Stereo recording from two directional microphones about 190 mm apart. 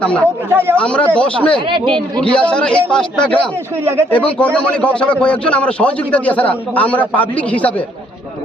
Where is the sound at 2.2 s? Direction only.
5° left (ahead or behind).